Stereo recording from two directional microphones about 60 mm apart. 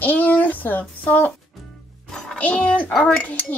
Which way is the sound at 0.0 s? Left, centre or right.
Left.